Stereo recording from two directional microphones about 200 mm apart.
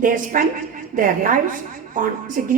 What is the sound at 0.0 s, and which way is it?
A woman's voice, 40° right (ahead or behind).